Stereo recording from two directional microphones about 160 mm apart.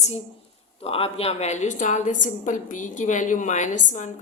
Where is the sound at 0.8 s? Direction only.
35° left (ahead or behind).